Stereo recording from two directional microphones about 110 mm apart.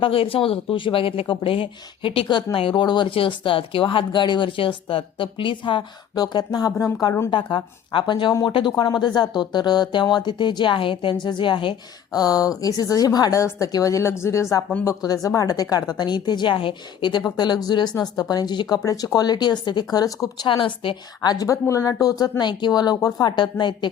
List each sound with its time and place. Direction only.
0.0 s speech: 55° left (ahead or behind); by 6.9 s 30° left (ahead or behind)
7.3 s speech: 45° left (ahead or behind)
12.1 s a woman's voice: 35° left (ahead or behind)
20.5 s a woman's voice: 50° left (ahead or behind)